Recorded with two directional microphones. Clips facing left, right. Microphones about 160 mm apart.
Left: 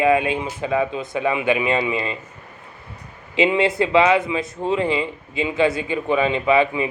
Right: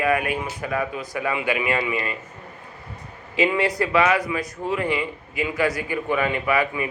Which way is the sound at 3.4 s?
25° left (ahead or behind).